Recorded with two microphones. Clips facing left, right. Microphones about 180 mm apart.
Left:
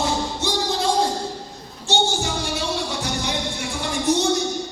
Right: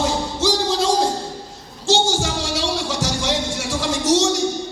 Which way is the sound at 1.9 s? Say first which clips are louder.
Right 3 dB; 90° right.